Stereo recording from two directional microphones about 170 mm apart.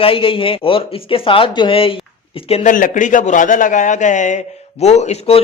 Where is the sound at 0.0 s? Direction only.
30° left (ahead or behind).